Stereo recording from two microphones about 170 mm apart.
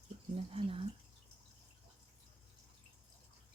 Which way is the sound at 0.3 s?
30° right (ahead or behind).